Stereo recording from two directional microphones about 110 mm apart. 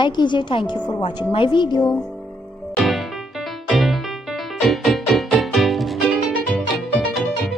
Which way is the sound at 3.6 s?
Centre (ahead or behind).